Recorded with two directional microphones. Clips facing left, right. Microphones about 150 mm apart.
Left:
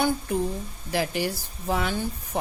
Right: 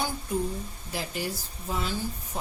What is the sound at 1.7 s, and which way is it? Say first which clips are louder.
Speech: left 5 dB; 65° left (ahead or behind).